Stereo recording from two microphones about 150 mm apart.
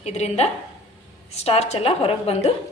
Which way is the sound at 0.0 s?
50° left (ahead or behind).